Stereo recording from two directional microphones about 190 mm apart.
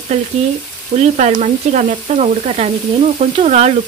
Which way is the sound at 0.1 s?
35° right (ahead or behind).